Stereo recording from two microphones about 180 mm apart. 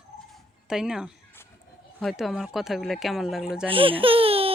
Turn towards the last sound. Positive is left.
turn(degrees=-30)  # may be behind; listen again after turning